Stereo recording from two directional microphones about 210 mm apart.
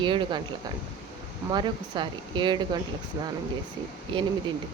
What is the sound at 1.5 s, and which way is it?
A woman's voice, 20° right (ahead or behind).